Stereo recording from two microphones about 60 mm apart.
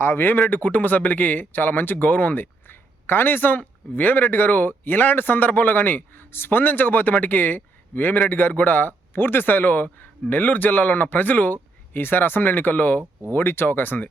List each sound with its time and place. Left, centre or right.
0.0 s speech: left
13.3 s speech: left